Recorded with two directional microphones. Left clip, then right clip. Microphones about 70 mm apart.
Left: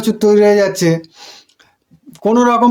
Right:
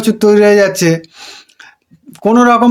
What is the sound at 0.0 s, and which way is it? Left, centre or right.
Speech, left.